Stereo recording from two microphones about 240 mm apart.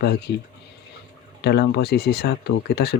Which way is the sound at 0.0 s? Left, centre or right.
Left.